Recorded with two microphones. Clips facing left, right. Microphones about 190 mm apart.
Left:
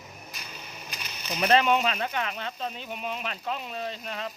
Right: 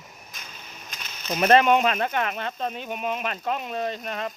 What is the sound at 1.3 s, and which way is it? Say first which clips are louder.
Speech: right 4 dB; 50° right (ahead or behind).